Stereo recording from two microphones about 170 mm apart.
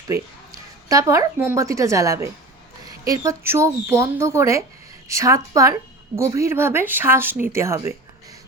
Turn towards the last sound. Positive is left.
turn(degrees=-15)  # may be behind; listen again after turning